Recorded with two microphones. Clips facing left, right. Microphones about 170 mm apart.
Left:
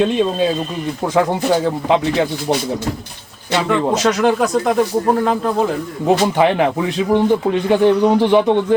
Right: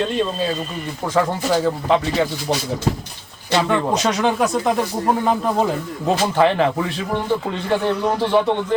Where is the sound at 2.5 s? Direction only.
15° left (ahead or behind).